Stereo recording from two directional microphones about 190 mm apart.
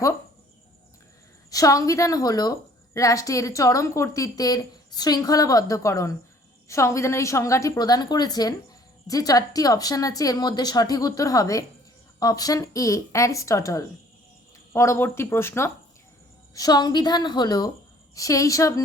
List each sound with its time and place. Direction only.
1.5 s a woman's voice: 20° left (ahead or behind)